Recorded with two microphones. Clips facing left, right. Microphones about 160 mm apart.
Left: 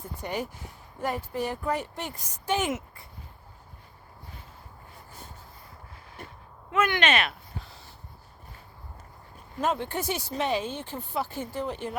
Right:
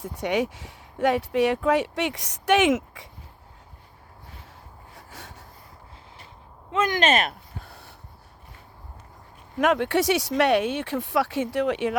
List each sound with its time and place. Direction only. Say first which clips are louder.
0.0 s speech: right 8 dB; 85° right
6.7 s a sound: right 3 dB; 30° right (ahead or behind); by 7.9 s 60° right (ahead or behind)
9.6 s speech: right 7 dB; 70° right (ahead or behind)